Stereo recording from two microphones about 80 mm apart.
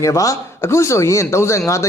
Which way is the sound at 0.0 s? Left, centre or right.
Left.